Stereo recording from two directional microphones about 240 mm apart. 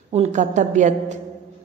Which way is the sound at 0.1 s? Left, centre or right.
Right.